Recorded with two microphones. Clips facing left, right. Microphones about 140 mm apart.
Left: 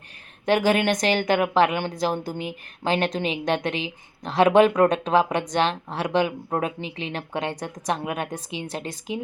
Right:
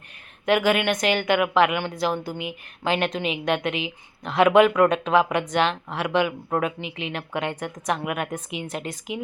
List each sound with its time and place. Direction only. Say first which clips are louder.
0.4 s a woman's voice: even; 35° left (ahead or behind)